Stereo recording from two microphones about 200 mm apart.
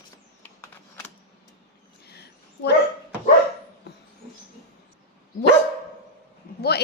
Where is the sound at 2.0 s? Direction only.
55° left (ahead or behind).